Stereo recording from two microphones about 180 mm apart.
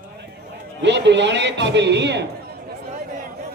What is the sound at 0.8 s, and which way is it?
A man's voice, 75° right (ahead or behind).